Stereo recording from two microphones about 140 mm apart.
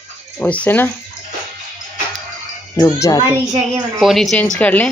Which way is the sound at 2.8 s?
20° left (ahead or behind).